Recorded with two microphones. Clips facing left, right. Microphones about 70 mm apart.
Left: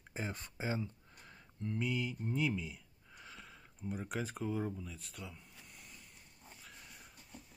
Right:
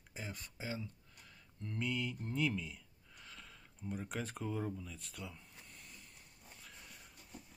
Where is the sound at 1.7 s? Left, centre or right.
Centre.